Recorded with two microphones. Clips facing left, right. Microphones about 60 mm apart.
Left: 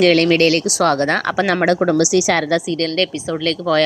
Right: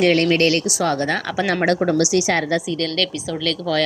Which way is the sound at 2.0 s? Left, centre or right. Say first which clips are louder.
Left 3 dB; left.